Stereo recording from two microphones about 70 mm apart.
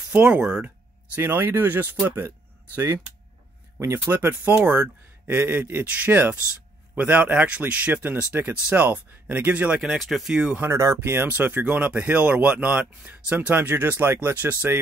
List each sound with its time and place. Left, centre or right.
0.1 s speech: centre
1.1 s speech: right
4.1 s speech: right
9.9 s speech: centre
10.3 s speech: centre
10.7 s speech: right
11.0 s speech: right